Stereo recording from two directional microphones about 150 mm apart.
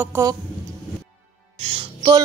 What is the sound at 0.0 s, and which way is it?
Speech, 15° right (ahead or behind).